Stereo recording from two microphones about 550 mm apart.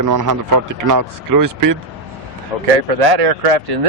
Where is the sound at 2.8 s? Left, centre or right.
Right.